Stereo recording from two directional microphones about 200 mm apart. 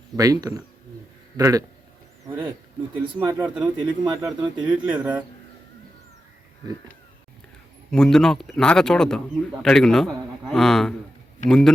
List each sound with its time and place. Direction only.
0.2 s speech: 20° right (ahead or behind)
7.9 s speech: 5° left (ahead or behind)